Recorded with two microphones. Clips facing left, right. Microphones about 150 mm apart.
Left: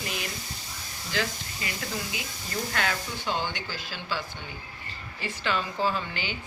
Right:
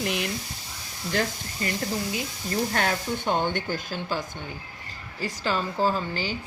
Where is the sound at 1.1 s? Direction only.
45° right (ahead or behind).